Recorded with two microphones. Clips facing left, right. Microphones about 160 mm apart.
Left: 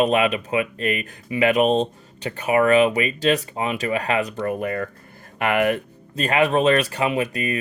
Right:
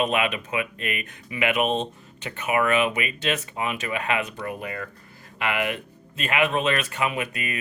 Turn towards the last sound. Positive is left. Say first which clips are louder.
# left 7 dB
turn(degrees=35)  # may be behind; listen again after turning